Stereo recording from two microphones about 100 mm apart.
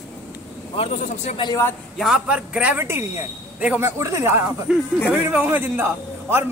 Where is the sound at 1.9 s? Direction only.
5° right (ahead or behind); by 4.5 s 25° right (ahead or behind).